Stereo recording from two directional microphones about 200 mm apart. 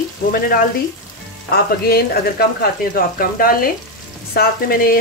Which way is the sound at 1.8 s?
50° left (ahead or behind).